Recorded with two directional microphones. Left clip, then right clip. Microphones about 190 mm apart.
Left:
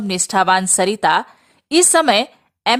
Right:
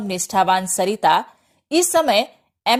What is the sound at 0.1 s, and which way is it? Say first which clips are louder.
A woman's voice: left 2 dB; 15° left (ahead or behind).